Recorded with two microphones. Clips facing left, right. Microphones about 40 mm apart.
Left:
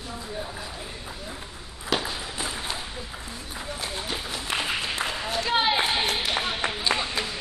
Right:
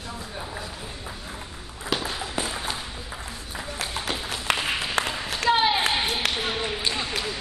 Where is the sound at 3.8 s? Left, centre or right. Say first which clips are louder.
Right 3 dB; right.